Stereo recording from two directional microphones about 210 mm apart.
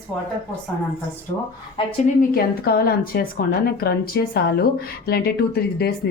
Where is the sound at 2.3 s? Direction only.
45° left (ahead or behind).